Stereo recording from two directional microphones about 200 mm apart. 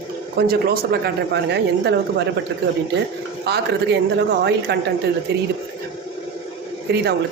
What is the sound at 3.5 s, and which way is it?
Speech, 55° right (ahead or behind).